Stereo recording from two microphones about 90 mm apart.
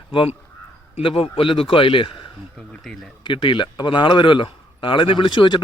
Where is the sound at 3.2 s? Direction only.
70° left (ahead or behind).